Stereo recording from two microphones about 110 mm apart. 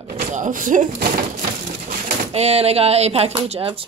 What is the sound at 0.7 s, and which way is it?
Speech, 90° right.